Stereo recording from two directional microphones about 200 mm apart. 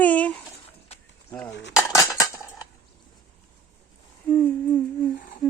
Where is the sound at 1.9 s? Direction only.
15° left (ahead or behind).